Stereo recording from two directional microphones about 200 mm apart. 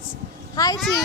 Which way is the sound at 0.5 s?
15° left (ahead or behind).